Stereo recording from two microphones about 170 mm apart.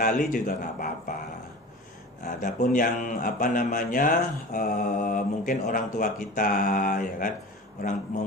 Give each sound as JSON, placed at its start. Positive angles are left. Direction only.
{"t": 0.0, "sound": "speech", "side_deg": 50}
{"t": 2.2, "sound": "speech", "side_deg": 50}